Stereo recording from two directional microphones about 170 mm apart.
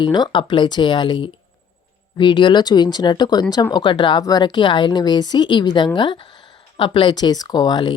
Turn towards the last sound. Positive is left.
turn(degrees=25)  # may be behind; listen again after turning